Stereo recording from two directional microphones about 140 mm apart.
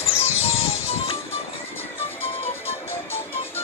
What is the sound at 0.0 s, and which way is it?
Music, 45° left (ahead or behind).